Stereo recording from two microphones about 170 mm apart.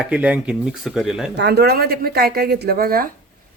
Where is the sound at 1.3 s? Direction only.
80° right; by 3.1 s 60° right (ahead or behind).